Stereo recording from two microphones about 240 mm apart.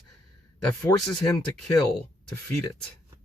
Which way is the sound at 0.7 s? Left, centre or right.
Centre.